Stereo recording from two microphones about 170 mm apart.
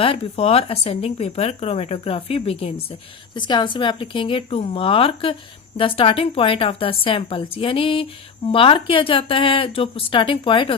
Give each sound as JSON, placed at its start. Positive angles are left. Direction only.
{"t": 0.0, "sound": "a woman's voice", "side_deg": 35}